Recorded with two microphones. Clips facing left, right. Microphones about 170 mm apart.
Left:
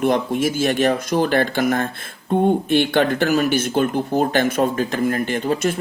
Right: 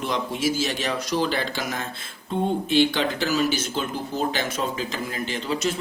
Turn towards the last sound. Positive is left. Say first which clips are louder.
# left 6 dB
turn(degrees=55)  # may be behind; listen again after turning